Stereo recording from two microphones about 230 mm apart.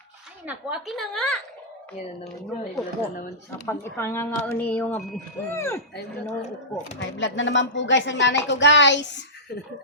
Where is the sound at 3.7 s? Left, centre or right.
Centre.